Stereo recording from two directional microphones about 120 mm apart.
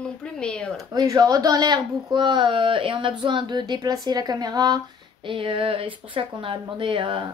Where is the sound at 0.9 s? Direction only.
35° right (ahead or behind).